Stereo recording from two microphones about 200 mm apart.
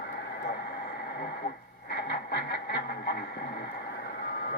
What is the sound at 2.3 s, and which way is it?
Music, 50° left (ahead or behind).